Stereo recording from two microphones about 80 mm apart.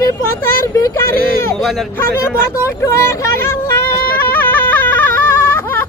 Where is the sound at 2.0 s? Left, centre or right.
Left.